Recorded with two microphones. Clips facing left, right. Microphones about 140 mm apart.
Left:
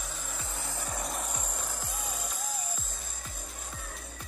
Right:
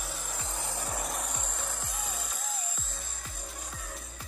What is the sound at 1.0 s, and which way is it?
Music, centre (ahead or behind).